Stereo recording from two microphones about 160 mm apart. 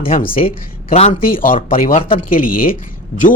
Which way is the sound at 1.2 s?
60° left (ahead or behind).